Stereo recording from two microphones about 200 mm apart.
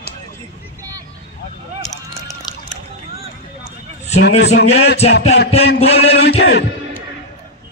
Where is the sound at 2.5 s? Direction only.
20° left (ahead or behind).